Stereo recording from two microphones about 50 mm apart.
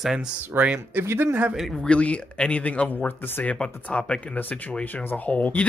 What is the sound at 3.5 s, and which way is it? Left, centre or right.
Speech, centre.